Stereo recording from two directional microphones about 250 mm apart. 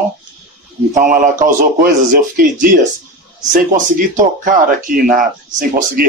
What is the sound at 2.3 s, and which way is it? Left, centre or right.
Speech, right.